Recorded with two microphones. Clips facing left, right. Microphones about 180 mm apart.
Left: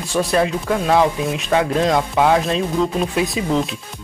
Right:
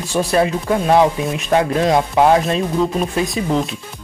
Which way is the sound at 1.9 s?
20° right (ahead or behind).